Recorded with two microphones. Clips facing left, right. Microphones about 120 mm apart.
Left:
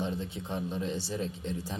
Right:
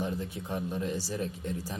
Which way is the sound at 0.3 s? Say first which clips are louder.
Right 1 dB; 25° left (ahead or behind).